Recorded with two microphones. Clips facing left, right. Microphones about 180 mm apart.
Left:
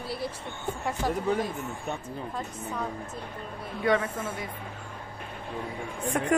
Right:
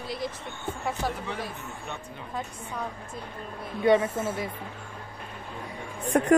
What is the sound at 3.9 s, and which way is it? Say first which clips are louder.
Speech: right 4 dB; 25° right (ahead or behind).